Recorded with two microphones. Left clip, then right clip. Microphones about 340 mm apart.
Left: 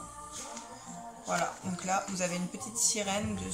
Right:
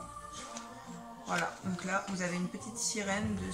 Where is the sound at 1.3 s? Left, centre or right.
Centre.